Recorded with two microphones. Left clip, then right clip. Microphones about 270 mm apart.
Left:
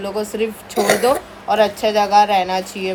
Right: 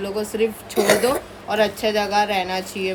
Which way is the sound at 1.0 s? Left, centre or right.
Centre.